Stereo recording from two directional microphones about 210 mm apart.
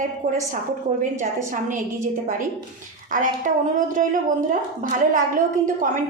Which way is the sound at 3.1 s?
40° right (ahead or behind).